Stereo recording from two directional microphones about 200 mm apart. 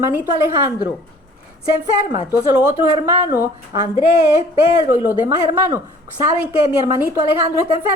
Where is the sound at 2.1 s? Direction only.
45° left (ahead or behind).